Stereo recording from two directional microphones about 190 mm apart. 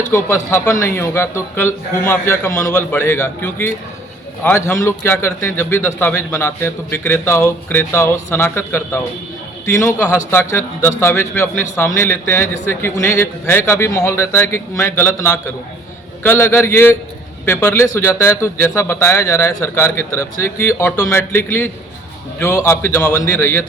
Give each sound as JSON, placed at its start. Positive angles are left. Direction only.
{"t": 0.1, "sound": "a man's voice", "side_deg": 15}